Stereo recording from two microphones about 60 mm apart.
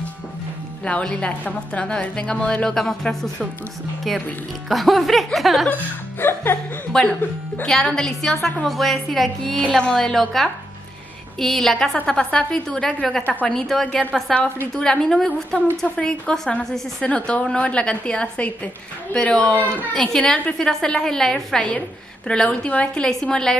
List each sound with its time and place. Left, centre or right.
0.8 s a woman's voice: centre
4.6 s speech: centre
5.7 s speech: left
6.9 s a woman's voice: centre
9.7 s a woman's voice: centre
19.9 s a woman's voice: centre